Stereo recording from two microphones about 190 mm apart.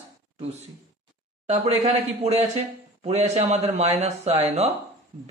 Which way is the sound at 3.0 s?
35° right (ahead or behind).